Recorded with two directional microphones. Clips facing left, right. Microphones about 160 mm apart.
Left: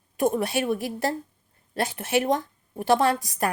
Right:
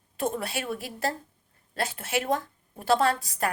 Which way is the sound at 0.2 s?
15° left (ahead or behind).